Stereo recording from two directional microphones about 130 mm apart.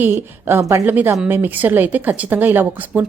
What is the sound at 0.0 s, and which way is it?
Speech, 15° right (ahead or behind).